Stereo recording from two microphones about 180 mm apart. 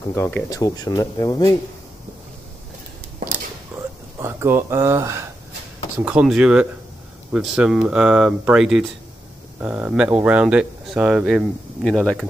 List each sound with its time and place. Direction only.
0.1 s speech: 10° left (ahead or behind)
4.2 s speech: 15° right (ahead or behind); by 12.3 s centre (ahead or behind)